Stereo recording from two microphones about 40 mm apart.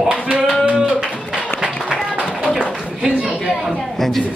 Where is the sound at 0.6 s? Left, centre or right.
Right.